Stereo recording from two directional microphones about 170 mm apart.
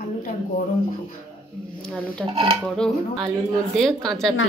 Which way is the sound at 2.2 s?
30° right (ahead or behind).